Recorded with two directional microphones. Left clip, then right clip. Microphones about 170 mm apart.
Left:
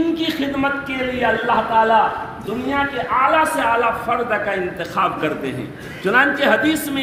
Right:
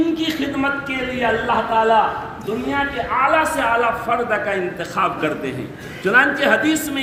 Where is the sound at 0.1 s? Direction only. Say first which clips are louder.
Left 1 dB; 25° left (ahead or behind).